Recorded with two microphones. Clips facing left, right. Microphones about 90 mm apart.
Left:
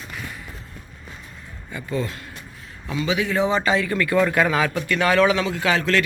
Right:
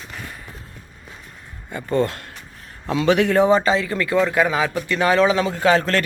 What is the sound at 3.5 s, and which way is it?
A man's voice, 30° right (ahead or behind).